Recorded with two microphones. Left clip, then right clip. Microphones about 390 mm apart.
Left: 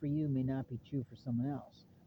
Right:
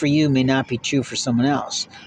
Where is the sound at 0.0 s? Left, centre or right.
Left.